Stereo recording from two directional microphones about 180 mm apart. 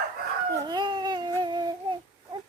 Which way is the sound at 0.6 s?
25° right (ahead or behind).